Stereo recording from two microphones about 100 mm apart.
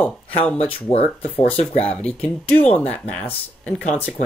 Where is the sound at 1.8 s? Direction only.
10° left (ahead or behind).